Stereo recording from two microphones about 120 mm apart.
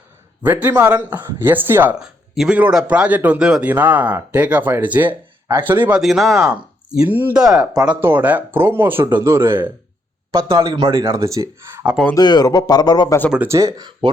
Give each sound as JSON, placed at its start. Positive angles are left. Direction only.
{"t": 0.4, "sound": "a man's voice", "side_deg": -15}
{"t": 6.0, "sound": "a man's voice", "side_deg": 0}
{"t": 7.6, "sound": "speech", "side_deg": -30}
{"t": 7.9, "sound": "a man's voice", "side_deg": -15}
{"t": 10.6, "sound": "speech", "side_deg": -45}
{"t": 11.2, "sound": "speech", "side_deg": -25}
{"t": 12.1, "sound": "speech", "side_deg": 35}
{"t": 13.5, "sound": "speech", "side_deg": -30}